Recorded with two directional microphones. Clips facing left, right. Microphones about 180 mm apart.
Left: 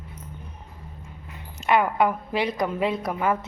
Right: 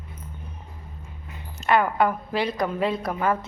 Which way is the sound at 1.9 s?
20° left (ahead or behind).